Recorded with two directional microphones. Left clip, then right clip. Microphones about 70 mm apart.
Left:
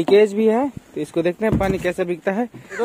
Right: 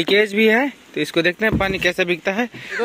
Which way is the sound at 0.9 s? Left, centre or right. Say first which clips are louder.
Right 3 dB; centre.